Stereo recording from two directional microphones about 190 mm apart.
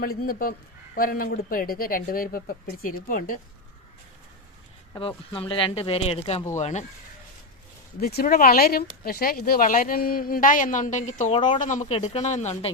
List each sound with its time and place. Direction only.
0.0 s speech: 50° left (ahead or behind)
4.9 s speech: 30° left (ahead or behind)
8.0 s speech: 50° left (ahead or behind)
11.3 s speech: 25° left (ahead or behind)
11.6 s speech: 40° left (ahead or behind)